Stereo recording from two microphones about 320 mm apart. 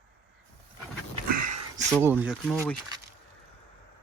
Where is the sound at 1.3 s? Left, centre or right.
Right.